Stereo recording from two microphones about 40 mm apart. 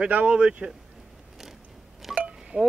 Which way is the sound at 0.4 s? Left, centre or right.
Right.